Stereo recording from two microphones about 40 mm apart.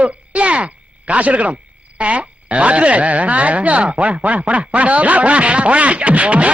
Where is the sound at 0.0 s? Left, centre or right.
Right.